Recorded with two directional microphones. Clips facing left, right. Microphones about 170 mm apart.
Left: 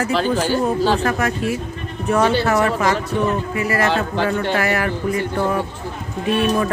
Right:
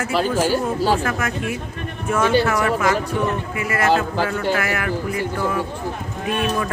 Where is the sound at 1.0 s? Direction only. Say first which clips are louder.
Left 4 dB; 35° left (ahead or behind).